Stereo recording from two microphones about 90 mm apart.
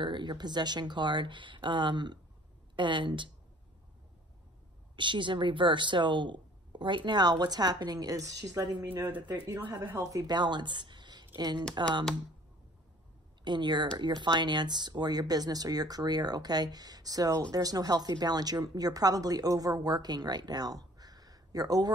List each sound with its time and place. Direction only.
0.0 s a woman's voice: 60° right (ahead or behind)
4.9 s a woman's voice: 60° right (ahead or behind)
8.8 s speech: 20° right (ahead or behind)
9.9 s speech: 45° right (ahead or behind)
13.4 s speech: 55° right (ahead or behind)